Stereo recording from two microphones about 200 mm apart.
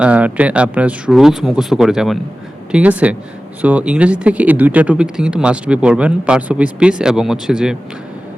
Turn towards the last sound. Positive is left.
turn(degrees=-5)  # may be behind; listen again after turning